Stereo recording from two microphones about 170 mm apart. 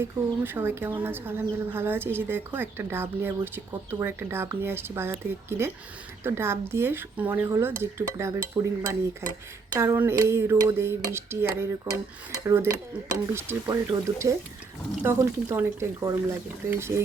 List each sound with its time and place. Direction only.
0.0 s cutlery: 15° right (ahead or behind)
13.7 s speech: 20° right (ahead or behind)
15.0 s cutlery: 15° right (ahead or behind)